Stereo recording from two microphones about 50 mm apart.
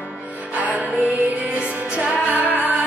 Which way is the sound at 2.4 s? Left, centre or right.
Left.